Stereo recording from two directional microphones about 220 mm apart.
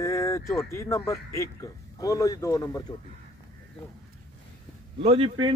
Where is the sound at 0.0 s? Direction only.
15° left (ahead or behind).